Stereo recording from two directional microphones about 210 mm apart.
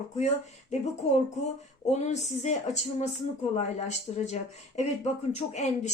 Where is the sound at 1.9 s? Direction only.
35° left (ahead or behind).